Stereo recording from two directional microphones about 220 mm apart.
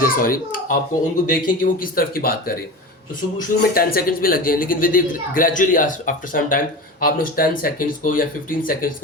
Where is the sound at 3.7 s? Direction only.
45° left (ahead or behind).